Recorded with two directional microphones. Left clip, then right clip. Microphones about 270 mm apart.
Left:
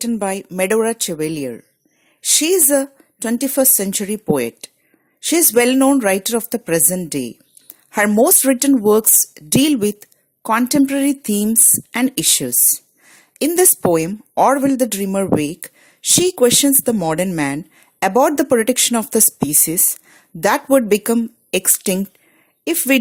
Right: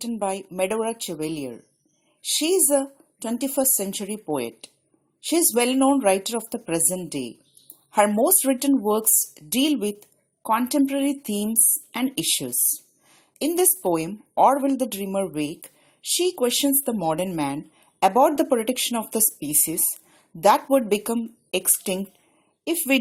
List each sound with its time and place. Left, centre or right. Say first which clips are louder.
0.0 s a woman's voice: left 6 dB; left